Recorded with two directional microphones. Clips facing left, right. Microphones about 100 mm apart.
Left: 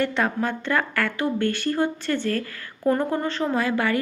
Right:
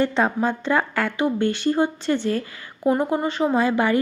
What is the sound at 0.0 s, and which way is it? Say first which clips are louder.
A woman's voice: right 3 dB; 20° right (ahead or behind).